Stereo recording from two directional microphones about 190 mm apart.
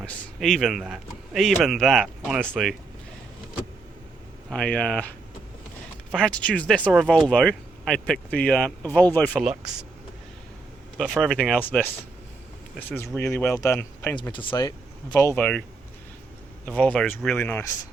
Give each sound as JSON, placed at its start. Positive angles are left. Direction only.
{"t": 0.0, "sound": "speech", "side_deg": 5}
{"t": 4.4, "sound": "speech", "side_deg": 5}
{"t": 9.4, "sound": "speech", "side_deg": -5}
{"t": 10.9, "sound": "speech", "side_deg": 0}
{"t": 13.1, "sound": "speech", "side_deg": 15}
{"t": 14.3, "sound": "speech", "side_deg": 25}
{"t": 15.1, "sound": "speech", "side_deg": 15}
{"t": 16.6, "sound": "speech", "side_deg": 5}